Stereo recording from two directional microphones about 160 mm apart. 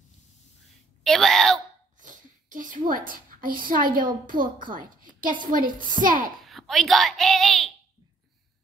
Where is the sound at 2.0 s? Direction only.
55° right (ahead or behind).